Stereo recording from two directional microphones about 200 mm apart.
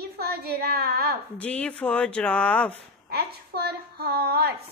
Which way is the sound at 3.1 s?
50° right (ahead or behind).